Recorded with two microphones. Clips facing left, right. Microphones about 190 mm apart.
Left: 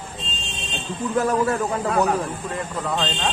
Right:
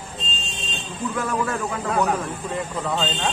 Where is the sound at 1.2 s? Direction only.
40° left (ahead or behind).